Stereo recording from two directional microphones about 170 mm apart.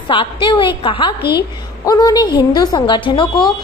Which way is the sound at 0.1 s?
30° left (ahead or behind).